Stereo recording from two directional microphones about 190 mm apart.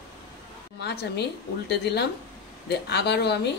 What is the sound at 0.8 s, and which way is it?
Speech, 60° left (ahead or behind).